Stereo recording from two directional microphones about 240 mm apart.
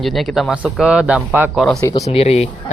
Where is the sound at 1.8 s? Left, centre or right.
Centre.